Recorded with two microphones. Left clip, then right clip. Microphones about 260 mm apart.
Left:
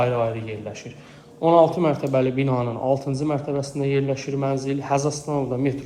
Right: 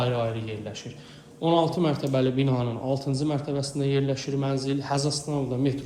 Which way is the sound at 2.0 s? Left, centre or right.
Centre.